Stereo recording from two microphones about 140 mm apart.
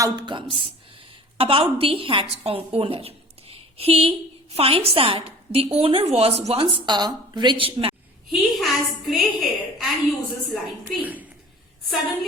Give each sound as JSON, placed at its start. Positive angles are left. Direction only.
{"t": 0.0, "sound": "a woman's voice", "side_deg": -30}
{"t": 8.3, "sound": "a woman's voice", "side_deg": 0}